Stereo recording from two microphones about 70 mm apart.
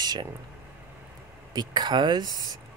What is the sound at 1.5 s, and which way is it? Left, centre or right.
Speech, right.